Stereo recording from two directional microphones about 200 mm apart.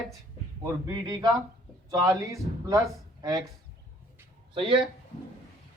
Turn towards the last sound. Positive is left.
turn(degrees=-25)  # may be behind; listen again after turning